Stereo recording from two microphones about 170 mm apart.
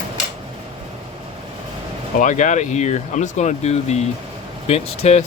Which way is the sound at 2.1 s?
45° left (ahead or behind).